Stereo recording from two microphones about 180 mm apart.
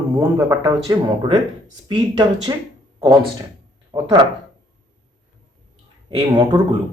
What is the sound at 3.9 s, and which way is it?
Speech, 25° right (ahead or behind).